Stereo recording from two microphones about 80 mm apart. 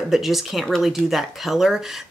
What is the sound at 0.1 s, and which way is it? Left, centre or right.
Speech, centre.